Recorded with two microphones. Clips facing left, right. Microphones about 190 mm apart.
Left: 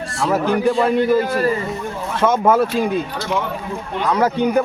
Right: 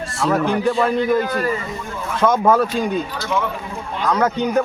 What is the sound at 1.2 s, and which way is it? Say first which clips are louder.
Speech: left 3 dB; 30° left (ahead or behind).